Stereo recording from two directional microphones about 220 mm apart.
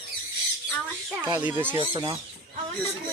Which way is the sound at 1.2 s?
10° right (ahead or behind).